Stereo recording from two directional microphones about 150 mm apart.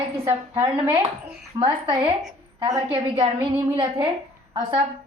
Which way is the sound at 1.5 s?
30° right (ahead or behind).